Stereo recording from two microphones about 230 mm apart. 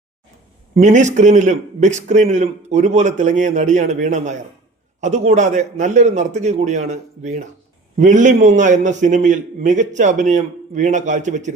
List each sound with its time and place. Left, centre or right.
0.8 s a man's voice: right